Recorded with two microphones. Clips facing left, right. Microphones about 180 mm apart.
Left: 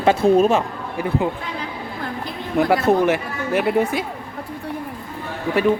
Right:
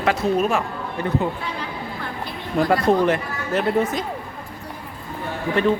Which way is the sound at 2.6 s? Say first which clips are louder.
Left 1 dB; 5° left (ahead or behind).